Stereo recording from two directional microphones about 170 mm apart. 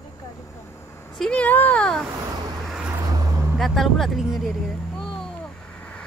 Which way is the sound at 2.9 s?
20° right (ahead or behind).